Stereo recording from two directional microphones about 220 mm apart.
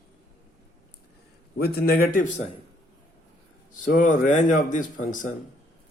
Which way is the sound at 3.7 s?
35° left (ahead or behind).